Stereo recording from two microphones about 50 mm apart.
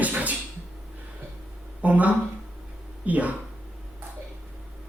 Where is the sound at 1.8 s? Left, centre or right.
Right.